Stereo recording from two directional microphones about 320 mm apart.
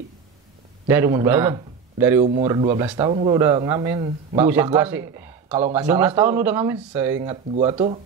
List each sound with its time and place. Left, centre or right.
0.8 s speech: centre